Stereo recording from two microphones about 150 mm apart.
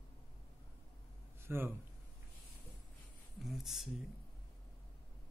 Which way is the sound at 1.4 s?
15° right (ahead or behind).